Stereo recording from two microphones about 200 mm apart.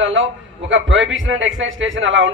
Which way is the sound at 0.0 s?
70° right (ahead or behind).